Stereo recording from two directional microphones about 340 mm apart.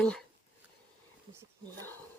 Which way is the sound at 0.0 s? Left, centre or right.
Centre.